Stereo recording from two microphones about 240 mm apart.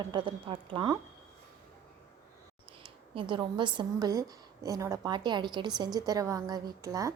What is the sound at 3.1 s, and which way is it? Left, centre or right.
A woman's voice, right.